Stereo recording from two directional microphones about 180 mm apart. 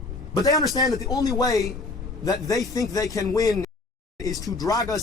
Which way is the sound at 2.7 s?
20° left (ahead or behind).